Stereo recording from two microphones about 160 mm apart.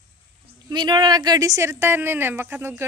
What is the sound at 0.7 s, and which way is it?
Speech, 30° right (ahead or behind).